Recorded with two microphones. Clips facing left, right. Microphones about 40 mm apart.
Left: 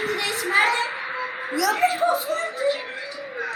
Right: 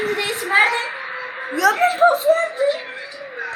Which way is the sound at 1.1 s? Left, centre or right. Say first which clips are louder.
Right 1 dB; centre.